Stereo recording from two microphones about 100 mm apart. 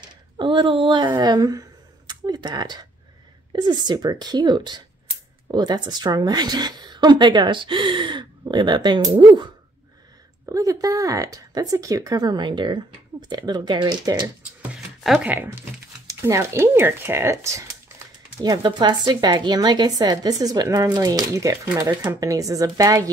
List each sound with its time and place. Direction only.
0.0 s a woman's voice: 55° right (ahead or behind)
10.4 s speech: 35° right (ahead or behind)
15.2 s speech: 20° right (ahead or behind)
16.1 s speech: 30° right (ahead or behind)
18.4 s a woman's voice: 45° right (ahead or behind)
21.8 s speech: 20° right (ahead or behind)
22.2 s speech: 35° right (ahead or behind)